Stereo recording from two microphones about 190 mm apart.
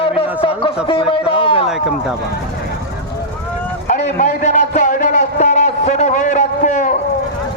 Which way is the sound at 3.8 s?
40° left (ahead or behind).